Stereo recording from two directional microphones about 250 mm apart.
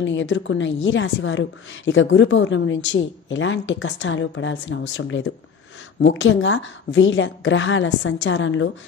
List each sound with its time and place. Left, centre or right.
0.0 s a woman's voice: left